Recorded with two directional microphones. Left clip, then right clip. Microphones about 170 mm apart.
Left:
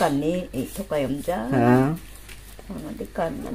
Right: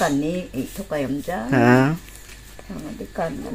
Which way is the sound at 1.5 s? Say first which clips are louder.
Right 4 dB; 10° right (ahead or behind).